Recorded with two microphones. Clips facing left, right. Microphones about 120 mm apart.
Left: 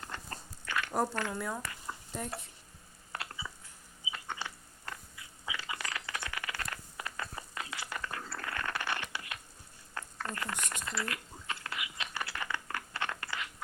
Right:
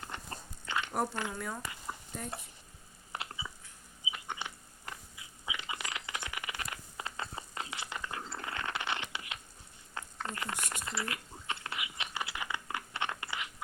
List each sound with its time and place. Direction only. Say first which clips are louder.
0.0 s dog: even; 20° right (ahead or behind)
1.3 s speech: left 3 dB; centre (ahead or behind)
3.1 s a sound: even; 20° right (ahead or behind)